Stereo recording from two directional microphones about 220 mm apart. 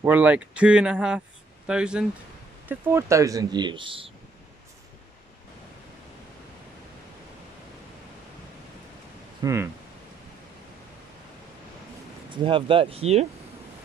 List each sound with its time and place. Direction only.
0.0 s speech: 5° right (ahead or behind); by 4.1 s 25° right (ahead or behind)
9.4 s speech: 15° right (ahead or behind)
12.3 s speech: 20° right (ahead or behind)